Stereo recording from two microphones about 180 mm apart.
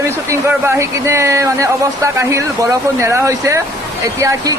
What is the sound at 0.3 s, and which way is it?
Speech, 15° right (ahead or behind).